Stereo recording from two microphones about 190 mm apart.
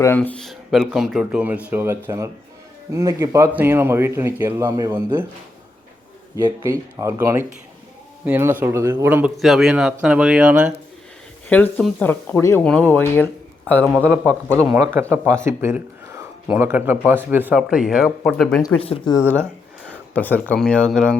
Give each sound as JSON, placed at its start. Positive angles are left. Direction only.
{"t": 0.0, "sound": "speech", "side_deg": 10}
{"t": 6.3, "sound": "speech", "side_deg": -15}
{"t": 11.4, "sound": "speech", "side_deg": 10}
{"t": 13.8, "sound": "speech", "side_deg": -10}
{"t": 18.8, "sound": "speech", "side_deg": 30}
{"t": 19.1, "sound": "speech", "side_deg": 10}